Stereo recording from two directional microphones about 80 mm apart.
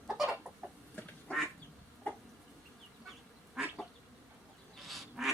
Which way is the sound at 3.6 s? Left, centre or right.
Centre.